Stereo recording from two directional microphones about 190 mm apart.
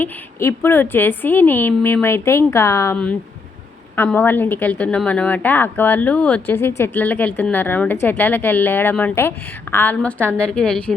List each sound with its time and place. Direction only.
0.0 s a woman's voice: 15° left (ahead or behind)